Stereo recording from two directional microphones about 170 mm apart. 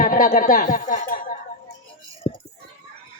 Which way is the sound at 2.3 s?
40° left (ahead or behind).